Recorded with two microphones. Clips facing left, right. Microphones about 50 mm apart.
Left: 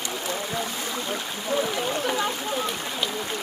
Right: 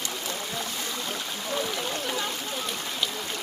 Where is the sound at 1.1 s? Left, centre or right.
Centre.